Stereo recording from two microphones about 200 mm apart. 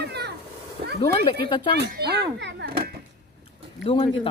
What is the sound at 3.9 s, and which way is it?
Speech, 30° left (ahead or behind).